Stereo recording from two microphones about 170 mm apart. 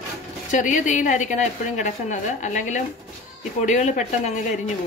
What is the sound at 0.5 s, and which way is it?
A woman's voice, 45° left (ahead or behind).